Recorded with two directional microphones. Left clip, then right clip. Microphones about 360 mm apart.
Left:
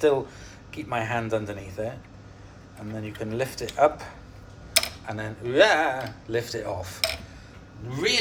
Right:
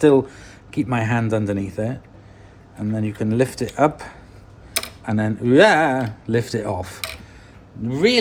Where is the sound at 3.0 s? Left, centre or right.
Right.